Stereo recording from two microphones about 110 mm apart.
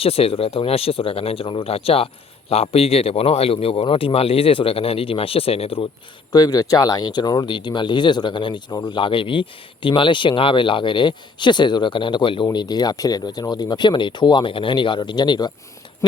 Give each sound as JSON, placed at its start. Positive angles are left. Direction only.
{"t": 0.0, "sound": "a man's voice", "side_deg": 60}
{"t": 6.3, "sound": "speech", "side_deg": 35}